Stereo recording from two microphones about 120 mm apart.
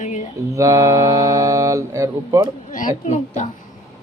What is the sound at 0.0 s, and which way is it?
Mantra, 80° left.